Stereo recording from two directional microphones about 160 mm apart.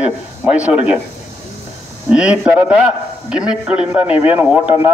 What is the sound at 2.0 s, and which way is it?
Speech, 5° right (ahead or behind).